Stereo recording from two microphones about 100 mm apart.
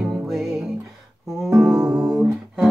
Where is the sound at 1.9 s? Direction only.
5° right (ahead or behind).